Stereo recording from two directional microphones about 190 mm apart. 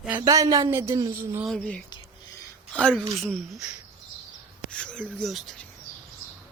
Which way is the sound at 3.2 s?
5° left (ahead or behind).